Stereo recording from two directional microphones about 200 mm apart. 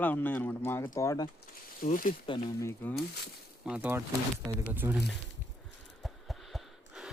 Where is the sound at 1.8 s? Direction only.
45° left (ahead or behind).